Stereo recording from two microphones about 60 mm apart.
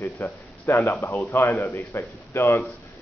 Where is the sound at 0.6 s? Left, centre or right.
Left.